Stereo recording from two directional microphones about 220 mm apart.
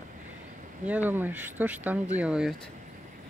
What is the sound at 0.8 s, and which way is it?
Speech, 5° right (ahead or behind).